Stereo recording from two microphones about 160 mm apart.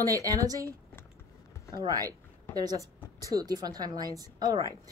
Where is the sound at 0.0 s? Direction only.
20° right (ahead or behind).